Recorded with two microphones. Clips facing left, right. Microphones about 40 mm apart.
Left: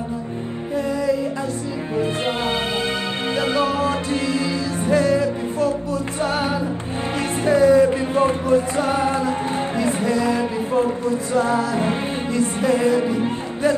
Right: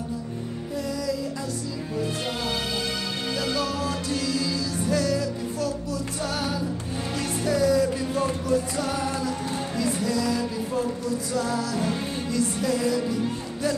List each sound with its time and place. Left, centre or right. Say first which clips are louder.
3.3 s music: left 8 dB; left
7.4 s music: left 8 dB; left